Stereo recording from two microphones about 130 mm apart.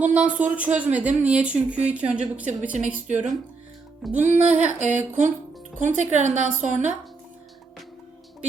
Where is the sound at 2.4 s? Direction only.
65° right (ahead or behind).